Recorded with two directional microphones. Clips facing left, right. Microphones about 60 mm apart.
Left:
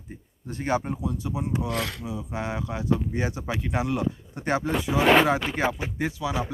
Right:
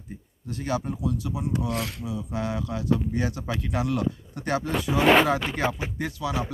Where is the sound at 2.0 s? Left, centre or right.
Left.